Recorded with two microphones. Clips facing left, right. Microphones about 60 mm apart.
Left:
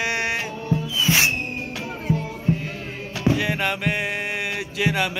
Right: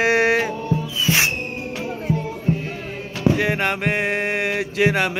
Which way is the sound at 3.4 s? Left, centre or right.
Right.